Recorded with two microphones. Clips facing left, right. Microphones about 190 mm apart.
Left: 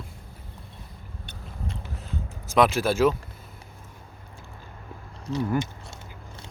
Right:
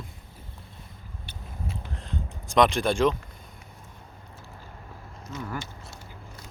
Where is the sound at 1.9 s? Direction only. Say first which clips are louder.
Even; 5° left (ahead or behind).